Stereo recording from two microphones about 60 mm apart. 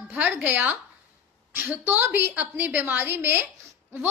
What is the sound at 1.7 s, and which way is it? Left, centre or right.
A woman's voice, right.